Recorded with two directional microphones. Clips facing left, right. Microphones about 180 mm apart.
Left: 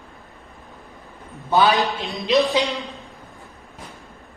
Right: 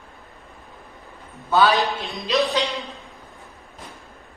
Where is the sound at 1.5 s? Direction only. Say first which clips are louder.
Left 1 dB; 15° left (ahead or behind).